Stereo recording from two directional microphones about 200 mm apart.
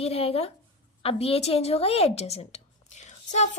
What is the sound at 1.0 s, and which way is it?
A woman's voice, 30° left (ahead or behind).